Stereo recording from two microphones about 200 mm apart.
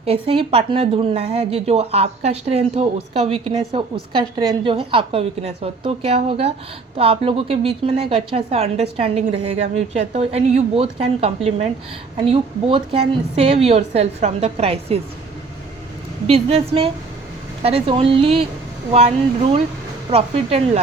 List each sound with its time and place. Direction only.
0.0 s a woman's voice: 30° right (ahead or behind)
16.2 s a woman's voice: 30° right (ahead or behind)